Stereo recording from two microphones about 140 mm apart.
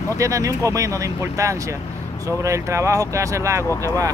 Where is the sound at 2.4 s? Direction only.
20° right (ahead or behind).